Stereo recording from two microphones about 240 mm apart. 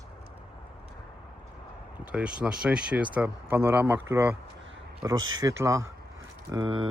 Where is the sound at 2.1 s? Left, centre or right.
Centre.